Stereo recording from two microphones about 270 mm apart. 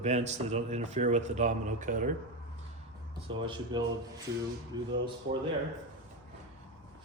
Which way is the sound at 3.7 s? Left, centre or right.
Centre.